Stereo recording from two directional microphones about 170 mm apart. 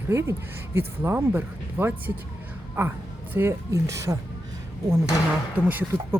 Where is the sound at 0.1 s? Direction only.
15° right (ahead or behind).